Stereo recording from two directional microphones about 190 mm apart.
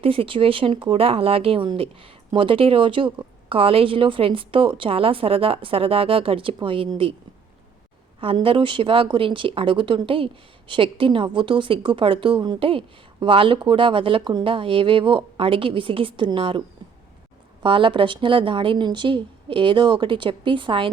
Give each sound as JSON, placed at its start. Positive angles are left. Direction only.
{"t": 0.0, "sound": "speech", "side_deg": -30}
{"t": 8.2, "sound": "speech", "side_deg": -25}